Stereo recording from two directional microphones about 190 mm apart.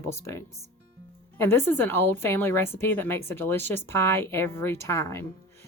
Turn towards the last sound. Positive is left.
turn(degrees=15)  # may be behind; listen again after turning